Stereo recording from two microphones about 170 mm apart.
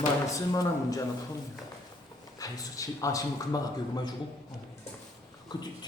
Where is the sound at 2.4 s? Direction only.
20° left (ahead or behind).